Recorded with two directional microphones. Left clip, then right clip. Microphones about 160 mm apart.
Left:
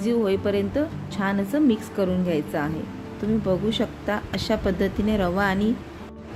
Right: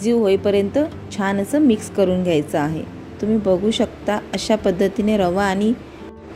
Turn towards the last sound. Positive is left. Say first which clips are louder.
# right 5 dB
turn(degrees=-20)  # may be behind; listen again after turning